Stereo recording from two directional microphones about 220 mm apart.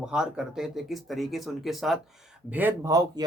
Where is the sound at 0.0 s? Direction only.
5° right (ahead or behind).